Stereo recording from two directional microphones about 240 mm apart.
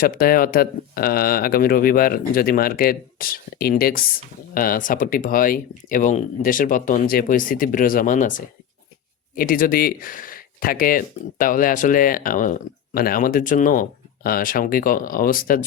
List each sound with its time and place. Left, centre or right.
0.0 s speech: left
9.3 s speech: left